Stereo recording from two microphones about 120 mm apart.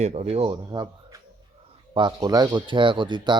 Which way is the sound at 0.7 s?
35° right (ahead or behind).